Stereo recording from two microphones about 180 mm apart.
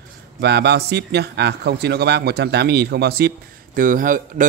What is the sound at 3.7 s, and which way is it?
Speech, 50° right (ahead or behind).